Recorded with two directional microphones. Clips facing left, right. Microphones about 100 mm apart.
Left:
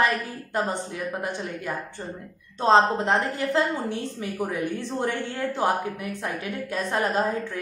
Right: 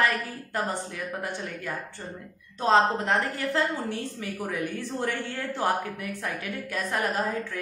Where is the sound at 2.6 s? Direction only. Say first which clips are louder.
Left 3 dB; 25° left (ahead or behind).